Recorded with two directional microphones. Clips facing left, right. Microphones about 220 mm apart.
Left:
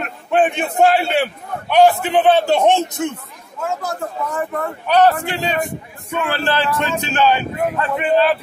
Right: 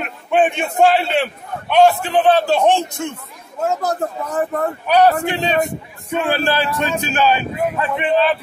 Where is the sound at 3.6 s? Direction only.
40° right (ahead or behind).